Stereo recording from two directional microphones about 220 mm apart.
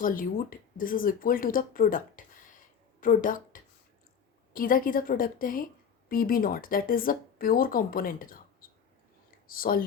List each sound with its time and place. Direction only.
0.0 s speech: 40° left (ahead or behind)
8.6 s a sound: 40° left (ahead or behind)
9.5 s speech: 40° left (ahead or behind)